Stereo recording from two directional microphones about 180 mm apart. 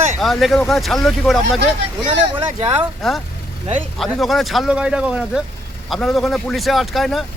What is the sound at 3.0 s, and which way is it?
Speech, centre (ahead or behind).